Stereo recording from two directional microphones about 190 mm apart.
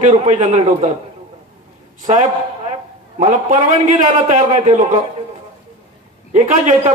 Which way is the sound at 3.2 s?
40° right (ahead or behind).